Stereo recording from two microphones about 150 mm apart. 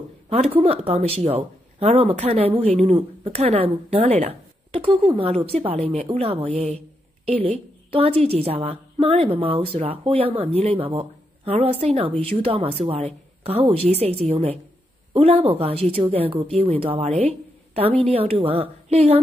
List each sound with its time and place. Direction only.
0.3 s a woman's voice: 40° right (ahead or behind)